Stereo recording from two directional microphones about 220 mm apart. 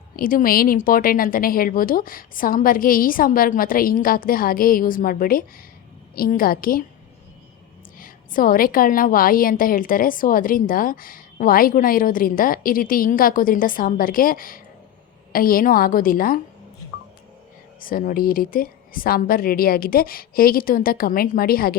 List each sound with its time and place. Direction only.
0.2 s a woman's voice: 40° left (ahead or behind)
7.9 s a woman's voice: 40° left (ahead or behind)
17.7 s a woman's voice: 40° left (ahead or behind)